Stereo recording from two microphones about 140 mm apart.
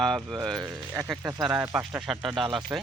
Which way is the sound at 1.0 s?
15° right (ahead or behind).